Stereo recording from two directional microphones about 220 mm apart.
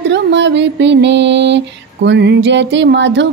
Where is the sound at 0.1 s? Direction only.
55° right (ahead or behind).